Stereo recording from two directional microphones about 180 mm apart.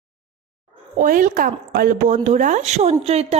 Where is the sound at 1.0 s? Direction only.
50° right (ahead or behind).